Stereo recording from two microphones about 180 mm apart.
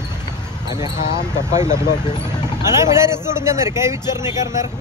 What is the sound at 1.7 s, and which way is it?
Speech, 20° left (ahead or behind).